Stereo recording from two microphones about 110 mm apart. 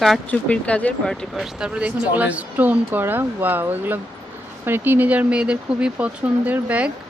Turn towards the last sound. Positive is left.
turn(degrees=-15)  # may be behind; listen again after turning